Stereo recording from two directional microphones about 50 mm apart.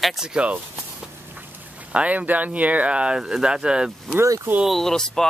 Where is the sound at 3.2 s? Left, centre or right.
Centre.